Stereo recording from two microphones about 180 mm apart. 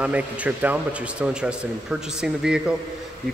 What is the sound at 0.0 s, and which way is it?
Speech, 10° right (ahead or behind).